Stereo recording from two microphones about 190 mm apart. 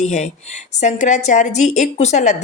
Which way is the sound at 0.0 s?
40° left (ahead or behind).